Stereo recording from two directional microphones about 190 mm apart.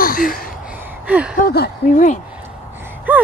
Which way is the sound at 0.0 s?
50° left (ahead or behind).